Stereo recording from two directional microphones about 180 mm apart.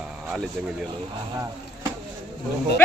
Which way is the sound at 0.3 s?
5° right (ahead or behind).